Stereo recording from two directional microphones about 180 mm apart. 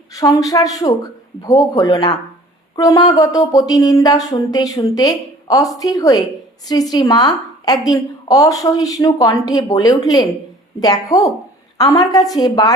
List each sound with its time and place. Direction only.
0.1 s a woman's voice: 20° left (ahead or behind)